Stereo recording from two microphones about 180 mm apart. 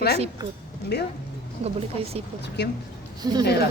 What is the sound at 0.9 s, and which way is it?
Speech, 65° left (ahead or behind).